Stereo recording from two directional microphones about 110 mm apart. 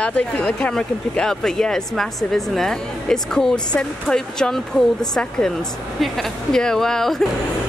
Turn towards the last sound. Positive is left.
turn(degrees=5)  # may be behind; listen again after turning